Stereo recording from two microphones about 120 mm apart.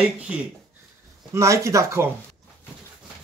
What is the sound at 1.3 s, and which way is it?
Speech, 25° right (ahead or behind).